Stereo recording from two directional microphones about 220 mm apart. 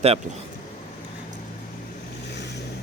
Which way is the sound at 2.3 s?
50° left (ahead or behind).